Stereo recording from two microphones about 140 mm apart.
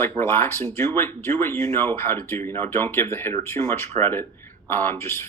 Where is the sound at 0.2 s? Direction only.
15° left (ahead or behind).